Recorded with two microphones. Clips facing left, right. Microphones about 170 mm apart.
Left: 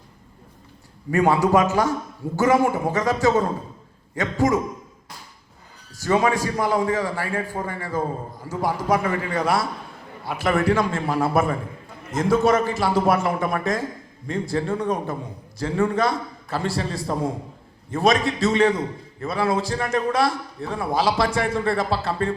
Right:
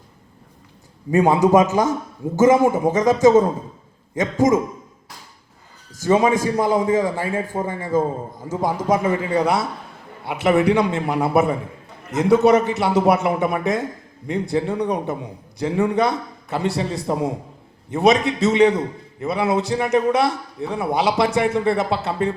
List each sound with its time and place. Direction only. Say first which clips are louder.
1.1 s a man's voice: right 3 dB; 20° right (ahead or behind)
6.0 s a man's voice: right 4 dB; 20° right (ahead or behind)